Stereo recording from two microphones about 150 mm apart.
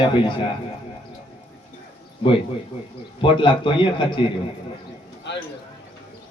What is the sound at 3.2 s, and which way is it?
A man's voice, 35° left (ahead or behind).